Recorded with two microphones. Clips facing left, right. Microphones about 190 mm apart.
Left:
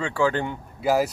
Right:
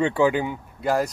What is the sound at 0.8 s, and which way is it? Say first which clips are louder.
Speech: left 1 dB; 5° left (ahead or behind).